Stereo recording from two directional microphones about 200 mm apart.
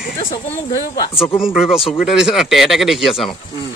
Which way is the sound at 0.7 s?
20° left (ahead or behind).